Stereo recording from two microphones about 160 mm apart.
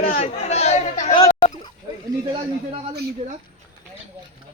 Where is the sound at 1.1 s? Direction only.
25° left (ahead or behind).